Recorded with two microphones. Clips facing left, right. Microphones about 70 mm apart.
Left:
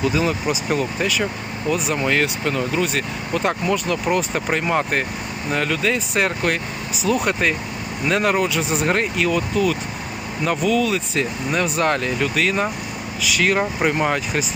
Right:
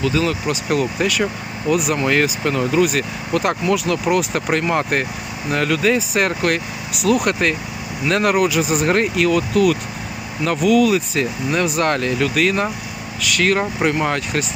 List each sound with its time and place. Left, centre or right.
0.0 s speech: centre
0.4 s speech: centre